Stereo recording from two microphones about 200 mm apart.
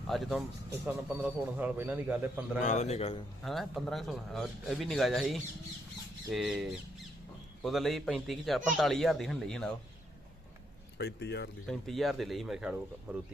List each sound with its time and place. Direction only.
0.1 s speech: centre (ahead or behind)
2.6 s a man's voice: 35° left (ahead or behind)
3.4 s speech: centre (ahead or behind)
10.9 s speech: 55° left (ahead or behind)
11.7 s speech: centre (ahead or behind)